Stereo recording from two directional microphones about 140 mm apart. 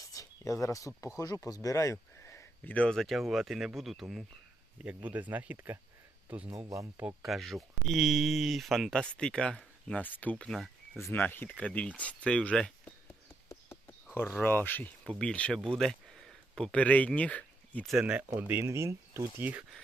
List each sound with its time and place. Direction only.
0.1 s speech: 25° left (ahead or behind); by 4.0 s centre (ahead or behind)
5.0 s speech: 10° right (ahead or behind)
7.2 s speech: centre (ahead or behind)
11.0 s speech: 15° left (ahead or behind)
13.5 s a sound: 20° left (ahead or behind)
15.2 s speech: 10° left (ahead or behind)
17.9 s speech: 10° right (ahead or behind)